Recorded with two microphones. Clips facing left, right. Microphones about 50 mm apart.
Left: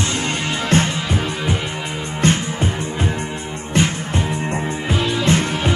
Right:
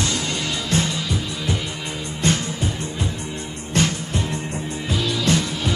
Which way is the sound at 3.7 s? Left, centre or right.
Left.